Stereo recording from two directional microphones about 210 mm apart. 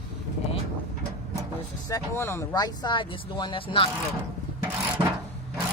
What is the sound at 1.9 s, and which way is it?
Speech, 10° left (ahead or behind).